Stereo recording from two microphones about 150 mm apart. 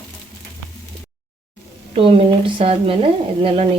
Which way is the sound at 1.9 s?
40° right (ahead or behind).